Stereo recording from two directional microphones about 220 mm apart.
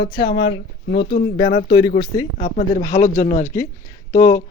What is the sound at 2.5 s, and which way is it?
Speech, 35° left (ahead or behind).